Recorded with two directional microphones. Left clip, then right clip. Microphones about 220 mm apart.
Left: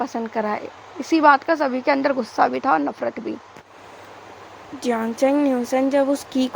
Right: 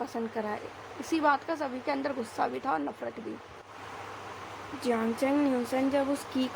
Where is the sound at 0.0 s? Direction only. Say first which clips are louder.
Left 10 dB; 30° left (ahead or behind).